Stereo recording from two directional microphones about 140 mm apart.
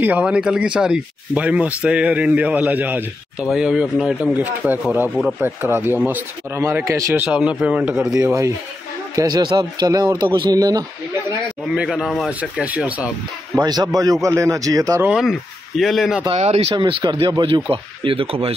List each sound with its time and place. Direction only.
0.0 s speech: 10° right (ahead or behind)
7.2 s speech: 5° right (ahead or behind)
9.1 s speech: 30° right (ahead or behind)
11.7 s speech: 5° right (ahead or behind)
13.6 s speech: 30° right (ahead or behind)
15.0 s speech: centre (ahead or behind)
16.3 s speech: 50° right (ahead or behind)
16.7 s speech: 35° right (ahead or behind)